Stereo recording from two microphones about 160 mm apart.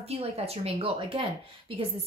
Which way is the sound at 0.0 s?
40° right (ahead or behind).